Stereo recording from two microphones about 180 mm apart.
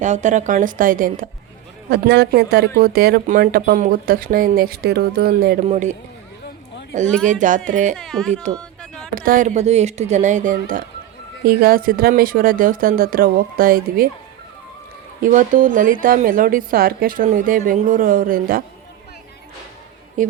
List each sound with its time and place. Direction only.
0.0 s a woman's voice: 40° right (ahead or behind)
1.9 s speech: 70° right (ahead or behind)
5.6 s a man's voice: 40° right (ahead or behind)
7.9 s speech: 5° left (ahead or behind)
8.5 s a sound: 5° left (ahead or behind)
9.1 s a woman's voice: 50° right (ahead or behind)
15.2 s a woman's voice: 45° right (ahead or behind)
20.2 s speech: 45° right (ahead or behind)